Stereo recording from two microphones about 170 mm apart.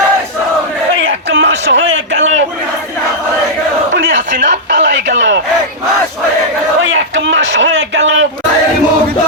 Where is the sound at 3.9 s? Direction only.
90° right.